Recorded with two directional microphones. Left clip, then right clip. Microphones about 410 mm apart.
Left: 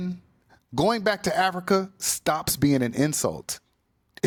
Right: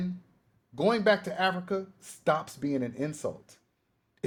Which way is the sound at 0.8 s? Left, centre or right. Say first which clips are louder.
Left 2 dB; left.